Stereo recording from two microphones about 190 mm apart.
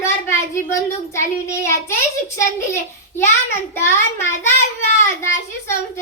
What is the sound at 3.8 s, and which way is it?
A child's voice, 15° left (ahead or behind).